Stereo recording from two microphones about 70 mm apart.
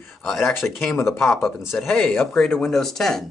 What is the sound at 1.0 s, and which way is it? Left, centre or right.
Speech, left.